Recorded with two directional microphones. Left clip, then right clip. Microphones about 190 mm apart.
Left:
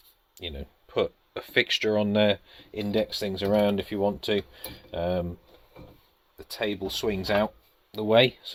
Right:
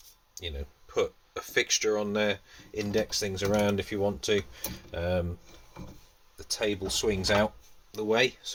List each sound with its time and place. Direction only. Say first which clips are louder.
0.3 s speech: left 1 dB; 45° left (ahead or behind)
6.5 s speech: even; 30° left (ahead or behind)
7.9 s speech: left 5 dB; 40° left (ahead or behind)